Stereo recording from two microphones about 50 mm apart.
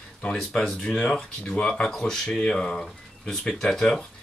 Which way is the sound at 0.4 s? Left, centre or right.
Centre.